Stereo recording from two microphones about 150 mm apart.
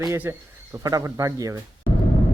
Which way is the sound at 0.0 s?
20° right (ahead or behind).